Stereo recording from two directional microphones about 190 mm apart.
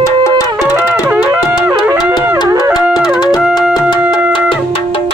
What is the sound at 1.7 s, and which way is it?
Music, 15° right (ahead or behind).